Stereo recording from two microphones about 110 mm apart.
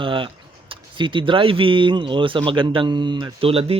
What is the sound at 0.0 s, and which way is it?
Speech, 50° right (ahead or behind).